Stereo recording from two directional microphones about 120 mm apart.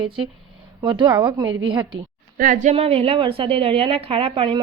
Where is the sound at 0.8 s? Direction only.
40° right (ahead or behind).